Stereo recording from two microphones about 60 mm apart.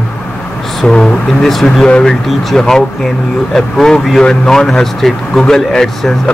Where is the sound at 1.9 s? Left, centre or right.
Centre.